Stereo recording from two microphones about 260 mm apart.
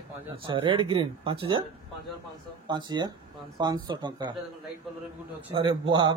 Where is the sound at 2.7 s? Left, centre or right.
Centre.